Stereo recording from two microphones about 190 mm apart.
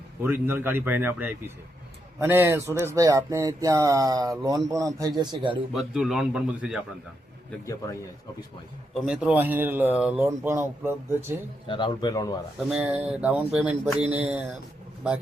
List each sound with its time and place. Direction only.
0.2 s a man's voice: 10° right (ahead or behind); by 5.6 s 25° right (ahead or behind)
5.7 s a man's voice: 5° right (ahead or behind)
7.6 s a man's voice: 15° left (ahead or behind)
9.0 s speech: 5° right (ahead or behind)
11.7 s a man's voice: 25° left (ahead or behind)
12.5 s speech: 5° right (ahead or behind)